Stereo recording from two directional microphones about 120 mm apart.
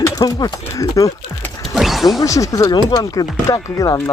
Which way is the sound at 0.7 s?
25° left (ahead or behind).